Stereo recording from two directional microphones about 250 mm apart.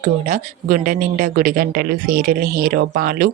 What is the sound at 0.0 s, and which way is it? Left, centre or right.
Speech, right.